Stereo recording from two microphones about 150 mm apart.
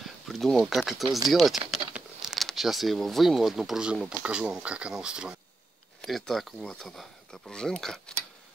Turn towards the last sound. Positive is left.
turn(degrees=5)  # may be behind; listen again after turning